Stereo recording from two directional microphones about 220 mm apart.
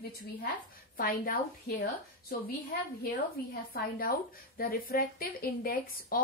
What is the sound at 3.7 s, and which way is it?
A woman's voice, 40° left (ahead or behind).